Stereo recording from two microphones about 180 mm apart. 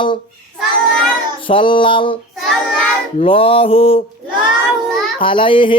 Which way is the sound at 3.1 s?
30° left (ahead or behind).